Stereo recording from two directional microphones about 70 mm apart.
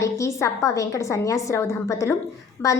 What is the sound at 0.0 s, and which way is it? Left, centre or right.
A woman's voice, left.